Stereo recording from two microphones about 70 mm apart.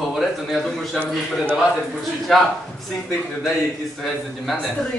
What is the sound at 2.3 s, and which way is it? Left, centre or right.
Speech, centre.